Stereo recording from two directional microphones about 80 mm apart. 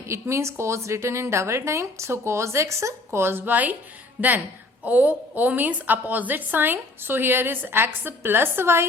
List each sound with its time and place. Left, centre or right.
0.1 s a woman's voice: right